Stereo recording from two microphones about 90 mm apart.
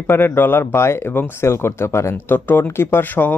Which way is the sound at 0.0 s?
25° left (ahead or behind).